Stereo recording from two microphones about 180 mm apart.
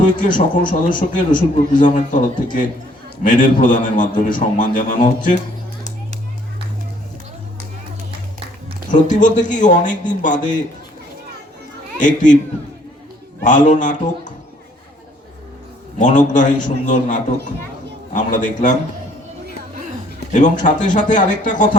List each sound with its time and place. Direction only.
0.0 s a man's voice: 45° left (ahead or behind)
8.9 s a man's voice: 45° left (ahead or behind)
11.9 s a man's voice: 45° left (ahead or behind)
13.4 s a man's voice: 45° left (ahead or behind)
16.0 s a man's voice: 45° left (ahead or behind)
20.1 s a man's voice: 45° left (ahead or behind)